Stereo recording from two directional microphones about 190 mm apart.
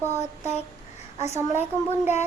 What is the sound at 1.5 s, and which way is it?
Speech, 10° right (ahead or behind).